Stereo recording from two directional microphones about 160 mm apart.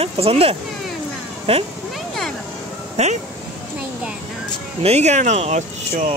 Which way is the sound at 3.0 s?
45° right (ahead or behind).